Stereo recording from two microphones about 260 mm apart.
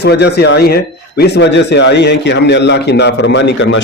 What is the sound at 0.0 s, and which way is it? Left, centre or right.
A man's voice, left.